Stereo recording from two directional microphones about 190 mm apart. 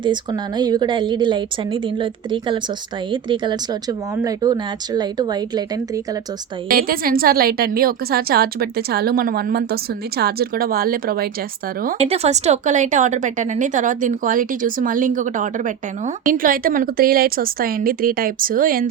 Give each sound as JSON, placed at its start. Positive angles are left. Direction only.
{"t": 0.0, "sound": "speech", "side_deg": -25}
{"t": 6.7, "sound": "a woman's voice", "side_deg": -50}
{"t": 11.9, "sound": "a woman's voice", "side_deg": -35}